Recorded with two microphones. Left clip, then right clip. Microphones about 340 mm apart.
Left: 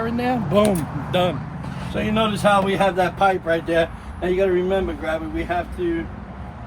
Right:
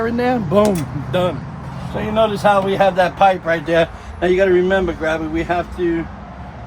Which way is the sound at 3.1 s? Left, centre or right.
Right.